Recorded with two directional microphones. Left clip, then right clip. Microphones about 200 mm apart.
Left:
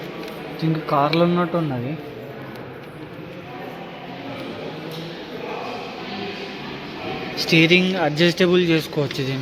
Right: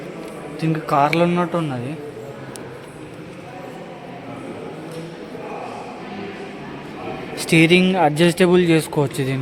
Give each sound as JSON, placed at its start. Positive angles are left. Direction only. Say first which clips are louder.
{"t": 0.6, "sound": "speech", "louder": "right 2 dB", "side_deg": 0}
{"t": 7.5, "sound": "speech", "louder": "right 2 dB", "side_deg": -10}